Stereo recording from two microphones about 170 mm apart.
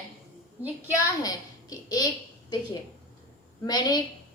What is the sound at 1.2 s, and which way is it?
Speech, 20° left (ahead or behind).